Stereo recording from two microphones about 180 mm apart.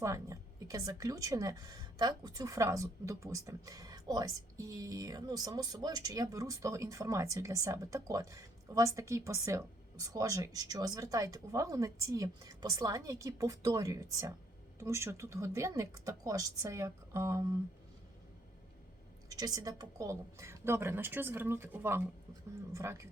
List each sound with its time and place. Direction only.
0.0 s a woman's voice: 15° right (ahead or behind)
19.3 s a woman's voice: 20° right (ahead or behind)